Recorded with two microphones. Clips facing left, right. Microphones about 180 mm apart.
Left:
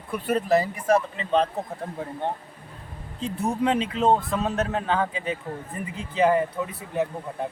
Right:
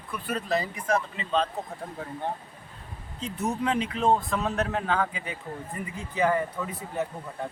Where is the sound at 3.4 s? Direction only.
25° left (ahead or behind).